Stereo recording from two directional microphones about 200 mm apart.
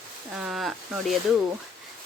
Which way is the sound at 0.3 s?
5° right (ahead or behind).